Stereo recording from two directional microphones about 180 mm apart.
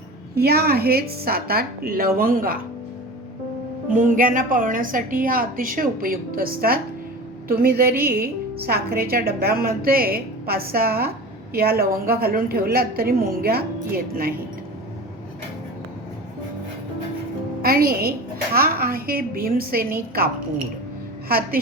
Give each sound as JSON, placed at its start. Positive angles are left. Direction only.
{"t": 0.3, "sound": "a woman's voice", "side_deg": -60}
{"t": 3.9, "sound": "a woman's voice", "side_deg": -45}
{"t": 17.6, "sound": "a woman's voice", "side_deg": -55}